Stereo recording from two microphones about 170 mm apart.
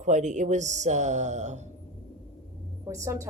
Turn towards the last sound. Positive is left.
turn(degrees=-20)  # may be behind; listen again after turning